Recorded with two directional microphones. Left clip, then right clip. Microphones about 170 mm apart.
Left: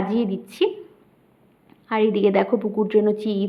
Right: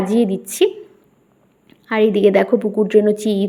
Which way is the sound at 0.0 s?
25° right (ahead or behind).